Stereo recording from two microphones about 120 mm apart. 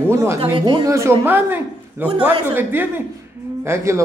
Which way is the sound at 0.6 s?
30° right (ahead or behind).